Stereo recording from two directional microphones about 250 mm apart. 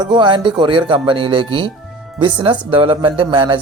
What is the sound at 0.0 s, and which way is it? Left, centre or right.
Speech, centre.